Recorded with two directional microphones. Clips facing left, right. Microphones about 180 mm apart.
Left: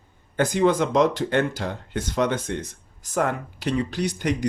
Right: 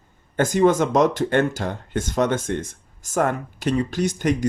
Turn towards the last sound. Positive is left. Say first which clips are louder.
# right 3 dB
turn(degrees=-45)  # may be behind; listen again after turning